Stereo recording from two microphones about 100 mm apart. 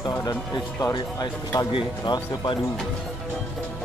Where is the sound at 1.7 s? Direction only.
55° left (ahead or behind).